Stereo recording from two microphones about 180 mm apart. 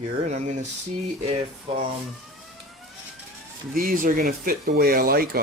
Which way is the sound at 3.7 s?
50° right (ahead or behind).